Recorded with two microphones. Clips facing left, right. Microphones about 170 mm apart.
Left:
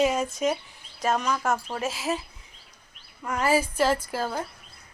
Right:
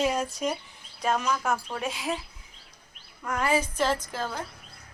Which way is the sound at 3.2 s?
10° left (ahead or behind).